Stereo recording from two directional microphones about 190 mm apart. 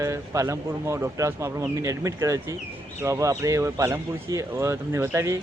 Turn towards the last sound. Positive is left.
turn(degrees=-15)  # may be behind; listen again after turning